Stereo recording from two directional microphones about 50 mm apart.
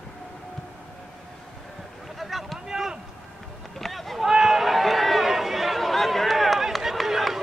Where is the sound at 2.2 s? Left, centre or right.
Centre.